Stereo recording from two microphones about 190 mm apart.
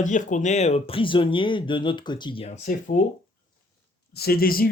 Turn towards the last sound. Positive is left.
turn(degrees=50)  # may be behind; listen again after turning